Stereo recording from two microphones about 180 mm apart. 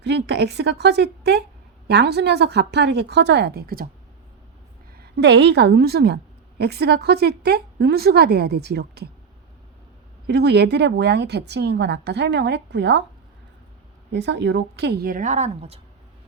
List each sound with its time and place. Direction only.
0.0 s a woman's voice: 70° right (ahead or behind)
4.9 s a woman's voice: 65° right (ahead or behind)
10.2 s a woman's voice: 65° right (ahead or behind)
14.1 s speech: 75° right (ahead or behind); by 15.8 s 35° right (ahead or behind)